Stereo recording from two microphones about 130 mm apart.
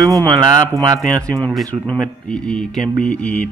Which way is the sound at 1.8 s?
10° left (ahead or behind).